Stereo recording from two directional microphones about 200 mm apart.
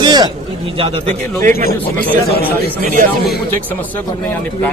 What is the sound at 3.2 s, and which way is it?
Speech, 10° left (ahead or behind).